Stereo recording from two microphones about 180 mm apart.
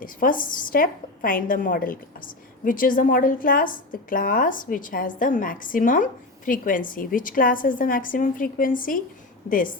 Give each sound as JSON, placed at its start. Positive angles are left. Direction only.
{"t": 0.0, "sound": "a woman's voice", "side_deg": 50}